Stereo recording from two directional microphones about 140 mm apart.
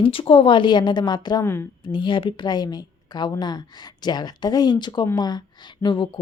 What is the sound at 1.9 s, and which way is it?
A woman's voice, 35° left (ahead or behind).